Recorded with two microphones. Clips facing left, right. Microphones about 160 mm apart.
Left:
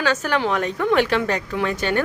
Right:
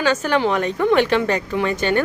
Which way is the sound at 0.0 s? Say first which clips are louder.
Right 3 dB; centre (ahead or behind).